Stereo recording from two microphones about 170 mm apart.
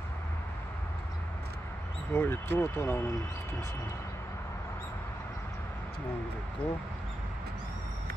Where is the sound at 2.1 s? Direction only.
15° left (ahead or behind).